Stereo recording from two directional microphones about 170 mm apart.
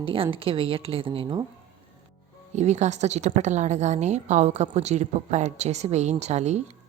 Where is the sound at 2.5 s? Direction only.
45° right (ahead or behind).